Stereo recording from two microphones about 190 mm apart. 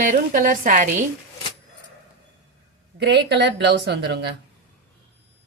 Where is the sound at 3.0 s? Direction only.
65° right (ahead or behind).